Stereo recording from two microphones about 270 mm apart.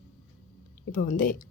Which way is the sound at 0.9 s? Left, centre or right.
Left.